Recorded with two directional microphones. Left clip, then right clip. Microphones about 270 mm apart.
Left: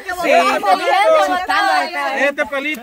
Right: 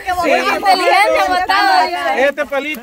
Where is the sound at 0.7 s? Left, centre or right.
Right.